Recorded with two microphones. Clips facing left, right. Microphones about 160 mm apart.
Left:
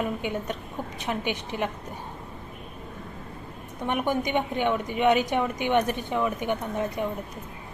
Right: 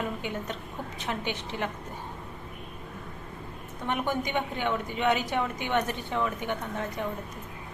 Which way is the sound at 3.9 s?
15° left (ahead or behind).